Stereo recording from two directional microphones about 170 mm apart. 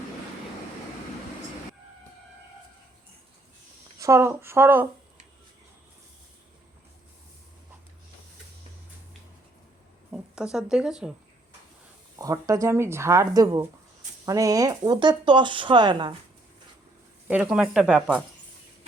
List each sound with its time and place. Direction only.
3.9 s speech: 20° right (ahead or behind)
10.1 s speech: 5° right (ahead or behind)
12.2 s speech: 20° right (ahead or behind)
17.2 s speech: 5° right (ahead or behind)